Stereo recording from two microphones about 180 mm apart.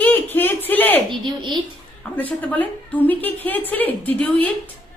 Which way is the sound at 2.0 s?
5° left (ahead or behind).